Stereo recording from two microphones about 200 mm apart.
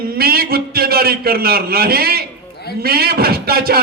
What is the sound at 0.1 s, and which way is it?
A man's voice, 50° right (ahead or behind).